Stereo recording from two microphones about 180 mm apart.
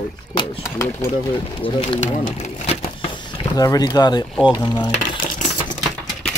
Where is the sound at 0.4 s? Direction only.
15° left (ahead or behind).